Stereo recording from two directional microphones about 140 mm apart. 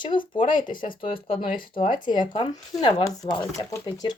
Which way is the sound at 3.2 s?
45° left (ahead or behind).